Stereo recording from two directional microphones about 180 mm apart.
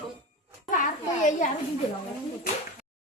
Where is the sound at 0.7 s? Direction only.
45° left (ahead or behind).